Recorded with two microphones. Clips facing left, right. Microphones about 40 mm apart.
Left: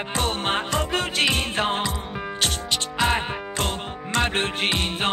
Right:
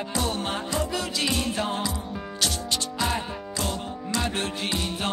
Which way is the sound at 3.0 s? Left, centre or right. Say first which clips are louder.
Left 8 dB; left.